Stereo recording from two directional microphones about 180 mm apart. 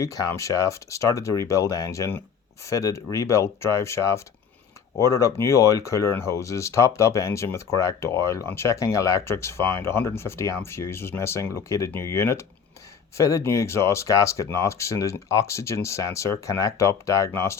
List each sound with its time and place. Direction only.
0.0 s speech: 15° left (ahead or behind)